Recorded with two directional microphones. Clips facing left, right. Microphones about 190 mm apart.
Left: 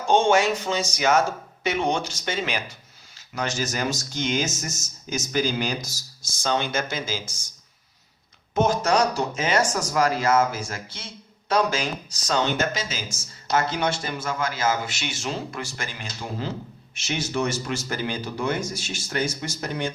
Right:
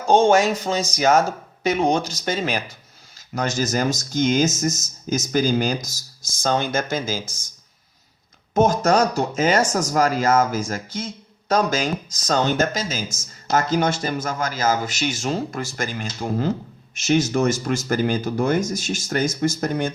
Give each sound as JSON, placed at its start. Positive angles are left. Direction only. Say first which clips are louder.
{"t": 0.1, "sound": "speech", "louder": "right 4 dB", "side_deg": -40}
{"t": 8.5, "sound": "speech", "louder": "right 4 dB", "side_deg": -45}